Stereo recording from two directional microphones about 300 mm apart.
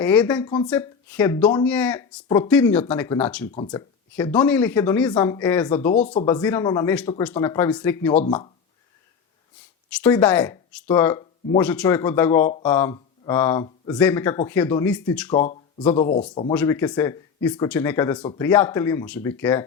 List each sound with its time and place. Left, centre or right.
0.0 s speech: centre
3.5 s speech: centre
9.9 s speech: centre
16.0 s speech: left
16.3 s speech: centre